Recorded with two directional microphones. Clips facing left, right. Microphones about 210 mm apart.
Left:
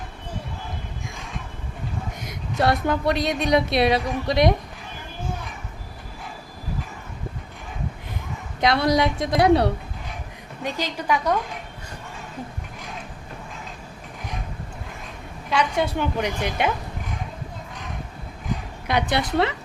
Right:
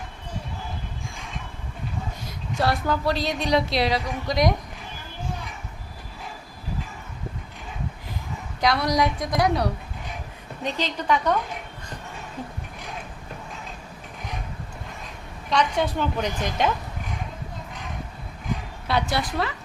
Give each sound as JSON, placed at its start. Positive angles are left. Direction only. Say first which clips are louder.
{"t": 2.2, "sound": "speech", "louder": "left 3 dB", "side_deg": 20}
{"t": 8.6, "sound": "speech", "louder": "left 2 dB", "side_deg": 25}
{"t": 10.6, "sound": "a woman's voice", "louder": "even", "side_deg": 10}
{"t": 15.4, "sound": "a woman's voice", "louder": "even", "side_deg": 10}
{"t": 18.9, "sound": "speech", "louder": "left 2 dB", "side_deg": 20}